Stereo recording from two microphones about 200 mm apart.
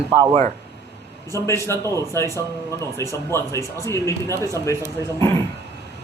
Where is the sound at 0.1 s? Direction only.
20° right (ahead or behind).